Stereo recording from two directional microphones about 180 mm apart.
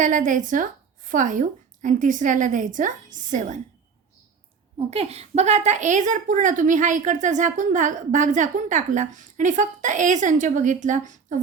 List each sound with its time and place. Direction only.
0.0 s a woman's voice: 45° right (ahead or behind)
4.9 s a woman's voice: 35° right (ahead or behind)